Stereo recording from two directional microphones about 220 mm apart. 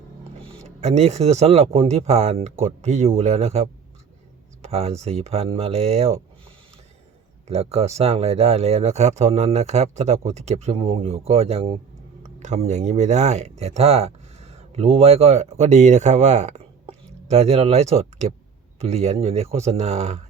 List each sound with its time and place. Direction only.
0.4 s speech: 30° right (ahead or behind)
7.4 s speech: 30° right (ahead or behind)